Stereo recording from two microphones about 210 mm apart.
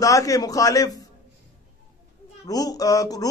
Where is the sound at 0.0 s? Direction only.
15° left (ahead or behind).